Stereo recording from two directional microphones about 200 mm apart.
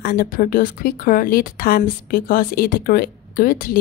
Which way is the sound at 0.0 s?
45° left (ahead or behind).